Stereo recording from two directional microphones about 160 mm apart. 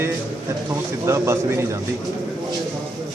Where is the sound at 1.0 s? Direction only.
15° right (ahead or behind).